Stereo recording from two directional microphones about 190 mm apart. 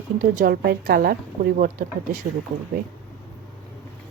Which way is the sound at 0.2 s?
50° right (ahead or behind).